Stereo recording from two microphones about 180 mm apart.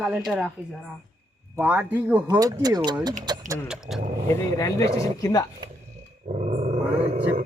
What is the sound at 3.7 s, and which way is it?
Speech, 5° right (ahead or behind).